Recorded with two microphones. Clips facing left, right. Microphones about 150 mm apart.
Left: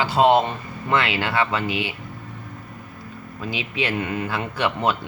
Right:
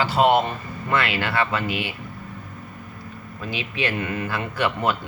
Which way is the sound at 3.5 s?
15° left (ahead or behind).